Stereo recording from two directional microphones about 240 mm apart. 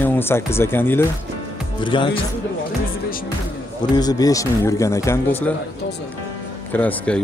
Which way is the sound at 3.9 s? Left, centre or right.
Centre.